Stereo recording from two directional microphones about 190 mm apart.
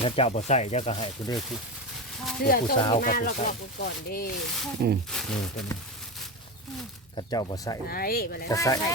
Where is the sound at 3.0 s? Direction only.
50° left (ahead or behind).